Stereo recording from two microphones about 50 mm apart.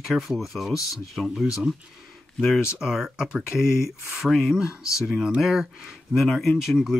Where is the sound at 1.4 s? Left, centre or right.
Centre.